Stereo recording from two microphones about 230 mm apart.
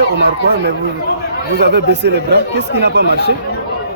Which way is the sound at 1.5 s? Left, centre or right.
Right.